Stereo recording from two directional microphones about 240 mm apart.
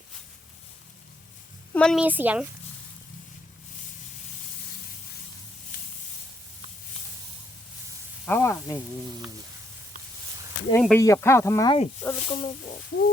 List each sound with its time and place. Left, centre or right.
1.7 s speech: centre
8.2 s speech: centre
10.7 s speech: centre; by 12.7 s left